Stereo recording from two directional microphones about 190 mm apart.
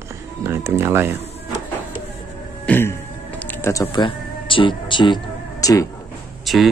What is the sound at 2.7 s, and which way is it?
Music, 10° left (ahead or behind).